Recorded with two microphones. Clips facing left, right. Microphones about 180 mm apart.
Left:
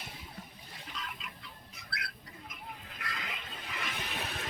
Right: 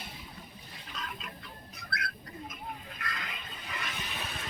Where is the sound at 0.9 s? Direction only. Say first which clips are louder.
Right 3 dB; 50° right (ahead or behind).